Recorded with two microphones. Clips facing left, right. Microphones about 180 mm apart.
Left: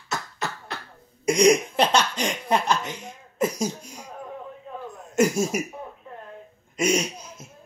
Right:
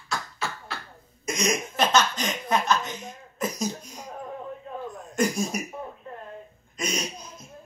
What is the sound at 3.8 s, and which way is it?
Speech, 10° left (ahead or behind).